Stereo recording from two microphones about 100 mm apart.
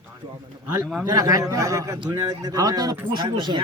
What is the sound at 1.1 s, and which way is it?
A man's voice, 40° right (ahead or behind).